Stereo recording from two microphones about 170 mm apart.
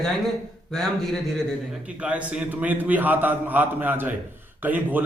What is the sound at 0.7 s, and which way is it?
A man's voice, 5° left (ahead or behind).